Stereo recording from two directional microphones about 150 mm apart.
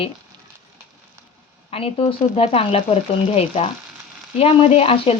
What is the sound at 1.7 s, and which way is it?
Speech, 40° left (ahead or behind).